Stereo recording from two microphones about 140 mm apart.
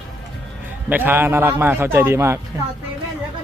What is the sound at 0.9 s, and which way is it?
A man's voice, 15° right (ahead or behind).